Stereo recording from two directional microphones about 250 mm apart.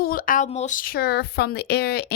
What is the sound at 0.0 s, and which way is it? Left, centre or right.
Speech, left.